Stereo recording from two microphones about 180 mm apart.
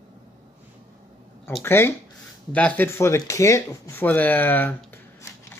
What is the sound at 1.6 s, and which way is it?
Speech, 15° left (ahead or behind).